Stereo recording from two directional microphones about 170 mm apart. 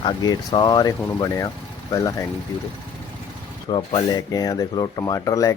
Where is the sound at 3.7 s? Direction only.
30° left (ahead or behind).